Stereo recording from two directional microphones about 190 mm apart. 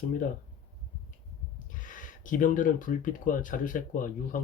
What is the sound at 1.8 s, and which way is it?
Speech, 45° left (ahead or behind).